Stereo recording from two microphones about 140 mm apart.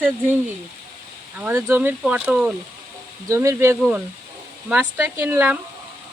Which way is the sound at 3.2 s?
20° right (ahead or behind).